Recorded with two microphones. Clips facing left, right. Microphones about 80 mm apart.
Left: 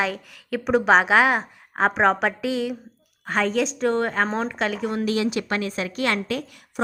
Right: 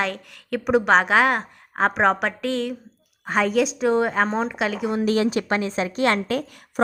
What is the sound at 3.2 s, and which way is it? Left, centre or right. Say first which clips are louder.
A woman's voice: right 2 dB; centre.